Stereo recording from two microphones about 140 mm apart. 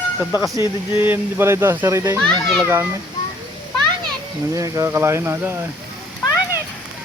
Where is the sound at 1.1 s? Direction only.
15° right (ahead or behind).